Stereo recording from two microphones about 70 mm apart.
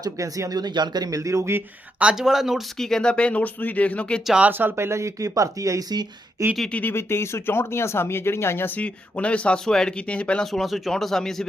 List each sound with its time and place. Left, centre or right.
0.2 s speech: right
0.6 s speech: right
1.1 s speech: right
2.0 s speech: centre
2.7 s speech: centre
4.4 s speech: right
6.7 s speech: centre
6.9 s speech: left
8.8 s speech: centre
10.4 s speech: centre